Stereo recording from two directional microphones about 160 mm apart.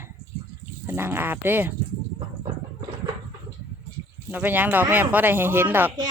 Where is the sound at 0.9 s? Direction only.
15° right (ahead or behind).